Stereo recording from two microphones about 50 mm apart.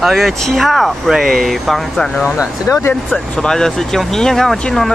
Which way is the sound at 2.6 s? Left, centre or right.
Left.